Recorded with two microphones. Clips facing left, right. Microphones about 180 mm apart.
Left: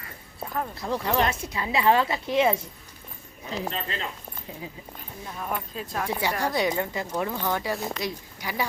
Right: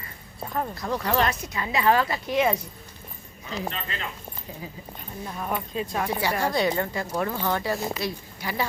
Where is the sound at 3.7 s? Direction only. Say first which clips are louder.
Left 2 dB; 30° left (ahead or behind).